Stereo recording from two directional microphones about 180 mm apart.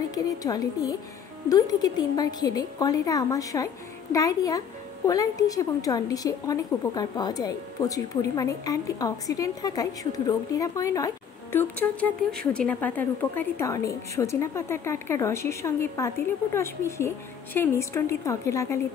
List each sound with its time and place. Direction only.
0.1 s a woman's voice: 20° left (ahead or behind)